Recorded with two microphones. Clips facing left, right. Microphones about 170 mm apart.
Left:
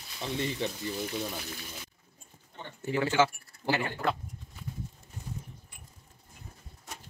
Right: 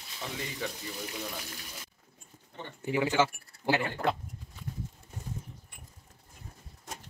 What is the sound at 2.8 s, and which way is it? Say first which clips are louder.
Speech: left 1 dB; 15° right (ahead or behind).